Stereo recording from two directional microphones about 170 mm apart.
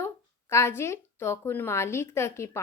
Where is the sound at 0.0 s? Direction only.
15° left (ahead or behind).